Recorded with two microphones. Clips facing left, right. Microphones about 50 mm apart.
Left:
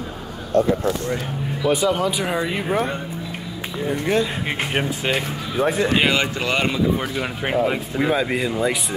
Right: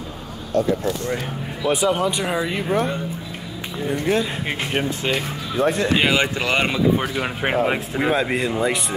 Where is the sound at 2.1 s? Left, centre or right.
Centre.